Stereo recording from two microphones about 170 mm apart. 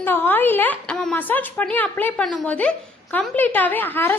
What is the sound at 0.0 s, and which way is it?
A woman's voice, 10° left (ahead or behind).